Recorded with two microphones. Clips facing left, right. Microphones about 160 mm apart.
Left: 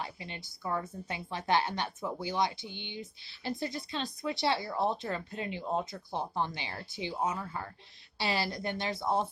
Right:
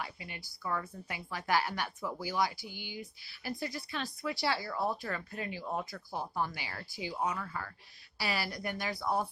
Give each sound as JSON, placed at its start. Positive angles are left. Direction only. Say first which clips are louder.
{"t": 0.0, "sound": "a woman's voice", "louder": "left 2 dB", "side_deg": 25}